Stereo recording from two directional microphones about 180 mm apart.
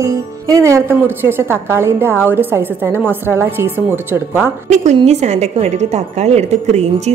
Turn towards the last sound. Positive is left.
turn(degrees=-40)  # may be behind; listen again after turning